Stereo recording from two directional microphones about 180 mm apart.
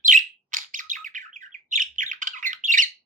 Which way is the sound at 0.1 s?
45° right (ahead or behind).